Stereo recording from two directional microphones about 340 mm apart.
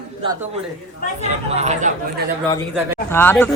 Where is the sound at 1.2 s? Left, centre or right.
Centre.